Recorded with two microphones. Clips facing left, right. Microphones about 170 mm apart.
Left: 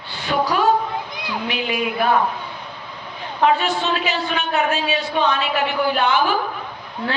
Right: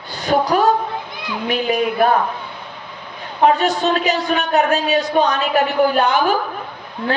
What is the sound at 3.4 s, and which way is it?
Speech, 40° right (ahead or behind).